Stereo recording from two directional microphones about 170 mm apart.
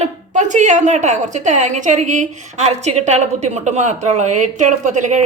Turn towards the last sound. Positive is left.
turn(degrees=-45)  # may be behind; listen again after turning